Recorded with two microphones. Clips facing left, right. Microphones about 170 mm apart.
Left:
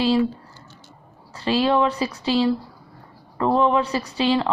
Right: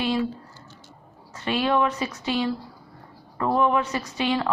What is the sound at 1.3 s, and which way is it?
A woman's voice, 30° left (ahead or behind).